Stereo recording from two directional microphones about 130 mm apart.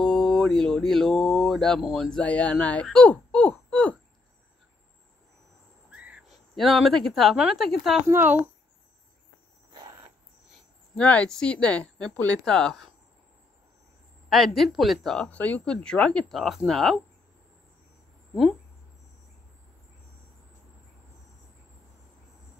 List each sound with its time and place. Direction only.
0.0 s speech: 5° left (ahead or behind)
5.9 s owl: 10° right (ahead or behind)
6.5 s speech: centre (ahead or behind)
8.1 s speech: 15° right (ahead or behind)
11.0 s speech: 10° left (ahead or behind)
14.3 s speech: centre (ahead or behind)